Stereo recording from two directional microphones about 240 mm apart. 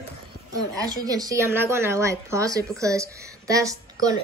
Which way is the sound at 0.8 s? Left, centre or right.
Centre.